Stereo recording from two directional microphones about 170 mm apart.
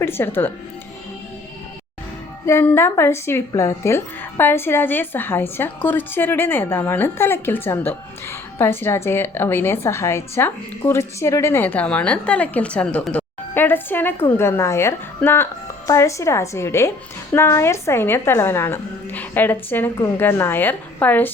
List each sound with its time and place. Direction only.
0.0 s a woman's voice: 15° left (ahead or behind)
2.5 s a woman's voice: 15° left (ahead or behind)